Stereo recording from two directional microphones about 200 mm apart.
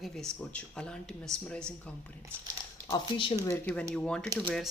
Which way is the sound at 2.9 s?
25° left (ahead or behind).